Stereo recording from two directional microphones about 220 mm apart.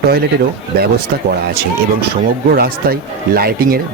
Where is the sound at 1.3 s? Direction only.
45° right (ahead or behind).